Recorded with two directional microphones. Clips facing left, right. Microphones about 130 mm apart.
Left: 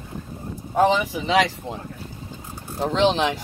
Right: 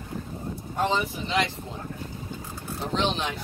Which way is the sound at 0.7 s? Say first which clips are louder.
Left 7 dB; 90° left.